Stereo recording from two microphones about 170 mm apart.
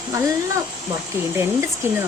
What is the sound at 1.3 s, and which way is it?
Speech, 15° right (ahead or behind).